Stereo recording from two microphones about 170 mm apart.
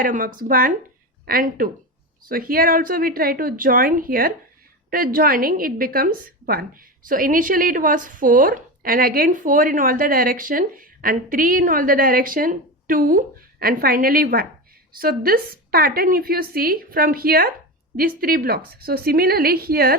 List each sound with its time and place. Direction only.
0.0 s a woman's voice: 55° right (ahead or behind)